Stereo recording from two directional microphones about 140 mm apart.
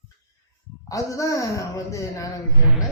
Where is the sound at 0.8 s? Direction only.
25° left (ahead or behind).